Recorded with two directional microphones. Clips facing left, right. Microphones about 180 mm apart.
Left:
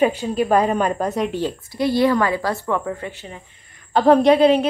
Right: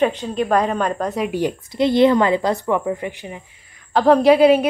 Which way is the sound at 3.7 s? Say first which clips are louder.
Even; centre (ahead or behind).